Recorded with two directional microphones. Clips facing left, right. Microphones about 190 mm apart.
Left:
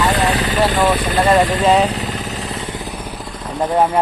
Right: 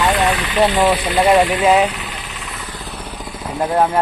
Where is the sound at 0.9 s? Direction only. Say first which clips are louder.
Left 1 dB; 50° left (ahead or behind).